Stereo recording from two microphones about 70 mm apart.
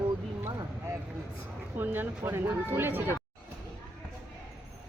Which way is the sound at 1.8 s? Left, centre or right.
Right.